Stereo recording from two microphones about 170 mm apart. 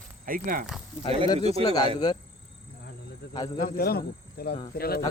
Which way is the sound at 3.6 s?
65° left (ahead or behind).